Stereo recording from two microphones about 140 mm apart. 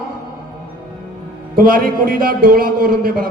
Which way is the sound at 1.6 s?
90° right.